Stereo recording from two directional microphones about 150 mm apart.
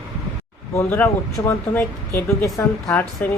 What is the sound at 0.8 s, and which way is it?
Speech, 15° left (ahead or behind).